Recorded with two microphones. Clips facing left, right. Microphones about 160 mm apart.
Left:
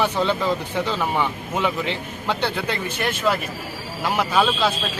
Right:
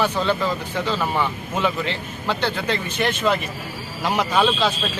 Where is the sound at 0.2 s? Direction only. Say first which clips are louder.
Left 1 dB; 15° left (ahead or behind).